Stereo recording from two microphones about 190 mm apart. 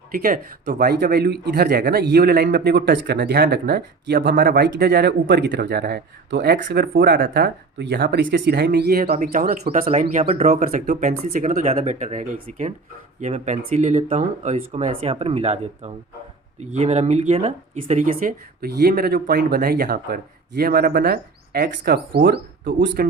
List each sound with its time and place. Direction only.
0.2 s speech: 50° right (ahead or behind)
9.8 s speech: 35° right (ahead or behind); by 23.0 s 55° right (ahead or behind)